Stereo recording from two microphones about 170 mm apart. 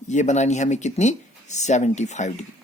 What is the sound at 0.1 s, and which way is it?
Speech, 45° left (ahead or behind).